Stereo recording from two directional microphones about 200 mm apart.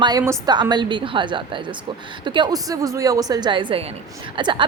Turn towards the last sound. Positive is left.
turn(degrees=-25)  # may be behind; listen again after turning